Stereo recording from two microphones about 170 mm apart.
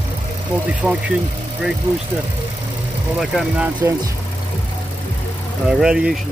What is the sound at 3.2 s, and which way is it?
Speech, centre (ahead or behind).